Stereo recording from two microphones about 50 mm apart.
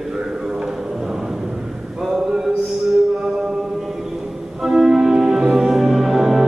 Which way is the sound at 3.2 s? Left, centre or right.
Centre.